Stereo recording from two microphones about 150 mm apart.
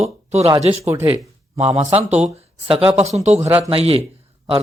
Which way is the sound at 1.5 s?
45° right (ahead or behind).